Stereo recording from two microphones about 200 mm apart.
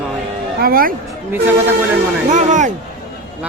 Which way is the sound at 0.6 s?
45° right (ahead or behind).